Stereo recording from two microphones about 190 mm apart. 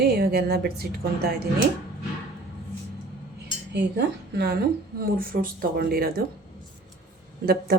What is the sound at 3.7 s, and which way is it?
Speech, 65° right (ahead or behind).